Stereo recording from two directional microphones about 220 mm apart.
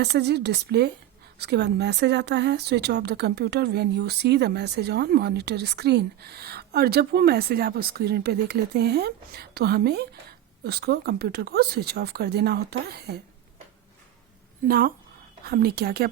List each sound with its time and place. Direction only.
0.0 s speech: 50° right (ahead or behind)
14.7 s a woman's voice: 40° right (ahead or behind)